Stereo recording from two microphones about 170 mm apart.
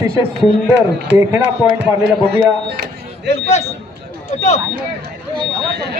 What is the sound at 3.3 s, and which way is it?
Speech, 40° left (ahead or behind).